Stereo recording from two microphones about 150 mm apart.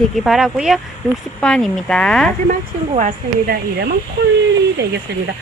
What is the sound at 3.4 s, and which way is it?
Speech, 90° right.